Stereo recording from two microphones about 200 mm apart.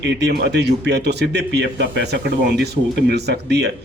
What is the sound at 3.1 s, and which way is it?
Speech, 55° right (ahead or behind).